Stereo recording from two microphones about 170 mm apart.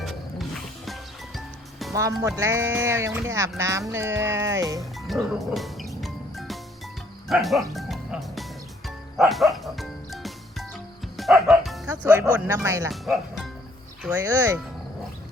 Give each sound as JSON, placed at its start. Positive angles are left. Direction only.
{"t": 0.0, "sound": "music", "side_deg": 0}
{"t": 1.9, "sound": "speech", "side_deg": -20}
{"t": 4.8, "sound": "music", "side_deg": 0}
{"t": 9.1, "sound": "bow-wow", "side_deg": 0}
{"t": 11.2, "sound": "music", "side_deg": 0}
{"t": 11.9, "sound": "speech", "side_deg": -20}
{"t": 12.9, "sound": "speech", "side_deg": 0}
{"t": 14.1, "sound": "speech", "side_deg": -20}